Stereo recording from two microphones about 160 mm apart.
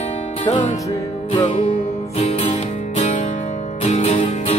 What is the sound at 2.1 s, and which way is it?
Music, 40° left (ahead or behind).